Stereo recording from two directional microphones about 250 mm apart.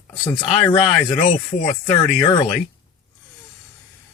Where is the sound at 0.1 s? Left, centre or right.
Centre.